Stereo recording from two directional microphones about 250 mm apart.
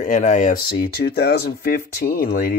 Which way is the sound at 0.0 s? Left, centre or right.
Left.